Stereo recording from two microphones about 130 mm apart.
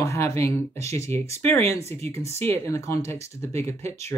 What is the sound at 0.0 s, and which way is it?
Speech, 20° left (ahead or behind).